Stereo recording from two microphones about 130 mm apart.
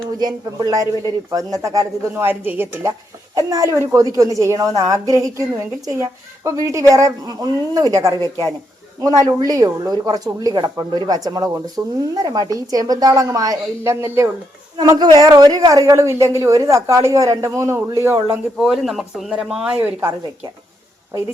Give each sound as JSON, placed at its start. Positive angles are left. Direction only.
{"t": 0.2, "sound": "speech", "side_deg": -30}
{"t": 14.8, "sound": "speech", "side_deg": -30}
{"t": 18.6, "sound": "speech", "side_deg": 0}
{"t": 19.7, "sound": "a woman's voice", "side_deg": -20}